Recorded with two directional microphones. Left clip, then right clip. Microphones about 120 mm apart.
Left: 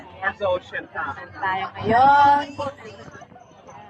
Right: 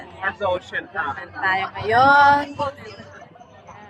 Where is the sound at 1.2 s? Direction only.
25° right (ahead or behind).